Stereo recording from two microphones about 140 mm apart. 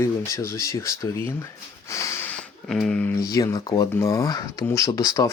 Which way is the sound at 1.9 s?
20° left (ahead or behind).